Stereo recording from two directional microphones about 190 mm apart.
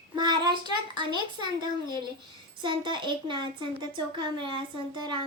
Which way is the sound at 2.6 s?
25° right (ahead or behind).